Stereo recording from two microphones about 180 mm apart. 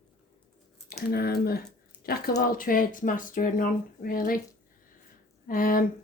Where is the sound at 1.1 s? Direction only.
60° left (ahead or behind).